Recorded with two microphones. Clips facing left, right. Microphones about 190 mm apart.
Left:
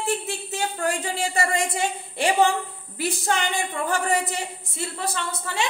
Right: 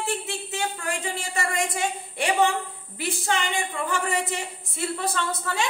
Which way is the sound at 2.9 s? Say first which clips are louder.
Left 3 dB; 40° left (ahead or behind).